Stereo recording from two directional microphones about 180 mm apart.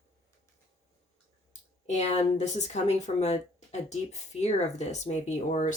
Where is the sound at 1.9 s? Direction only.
40° left (ahead or behind).